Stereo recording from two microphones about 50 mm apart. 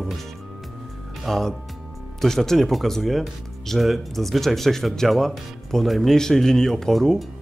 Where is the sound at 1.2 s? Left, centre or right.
Centre.